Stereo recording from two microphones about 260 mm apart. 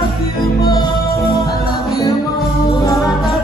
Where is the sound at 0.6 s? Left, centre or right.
Centre.